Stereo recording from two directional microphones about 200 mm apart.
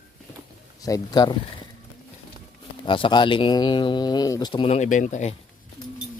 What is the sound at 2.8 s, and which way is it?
Speech, 25° left (ahead or behind).